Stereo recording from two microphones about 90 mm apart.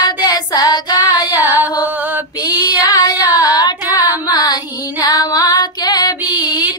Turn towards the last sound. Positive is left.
turn(degrees=50)  # may be behind; listen again after turning